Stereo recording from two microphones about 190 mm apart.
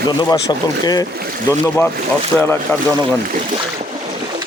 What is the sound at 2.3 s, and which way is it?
Speech, 5° left (ahead or behind).